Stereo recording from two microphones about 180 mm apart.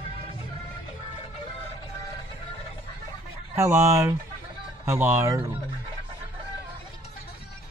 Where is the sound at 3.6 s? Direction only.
15° right (ahead or behind).